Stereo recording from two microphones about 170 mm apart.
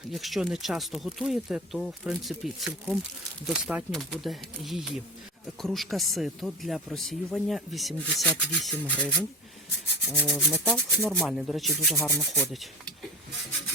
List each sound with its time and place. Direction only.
0.1 s speech: centre (ahead or behind)
10.2 s rub: 5° right (ahead or behind)
10.7 s speech: 5° left (ahead or behind)
11.9 s rub: 15° left (ahead or behind)